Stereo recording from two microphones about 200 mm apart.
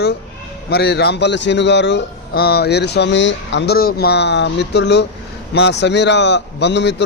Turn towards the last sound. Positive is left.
turn(degrees=60)  # may be behind; listen again after turning